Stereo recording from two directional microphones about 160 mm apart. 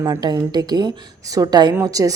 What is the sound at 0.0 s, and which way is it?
Speech, 25° right (ahead or behind).